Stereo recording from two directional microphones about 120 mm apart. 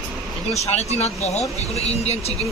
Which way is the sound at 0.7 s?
65° left (ahead or behind).